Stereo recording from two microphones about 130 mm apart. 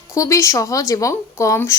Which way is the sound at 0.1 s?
25° left (ahead or behind).